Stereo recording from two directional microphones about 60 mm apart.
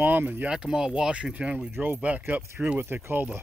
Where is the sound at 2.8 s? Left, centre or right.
Right.